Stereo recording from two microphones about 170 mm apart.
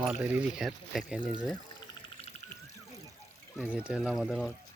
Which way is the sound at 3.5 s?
5° right (ahead or behind).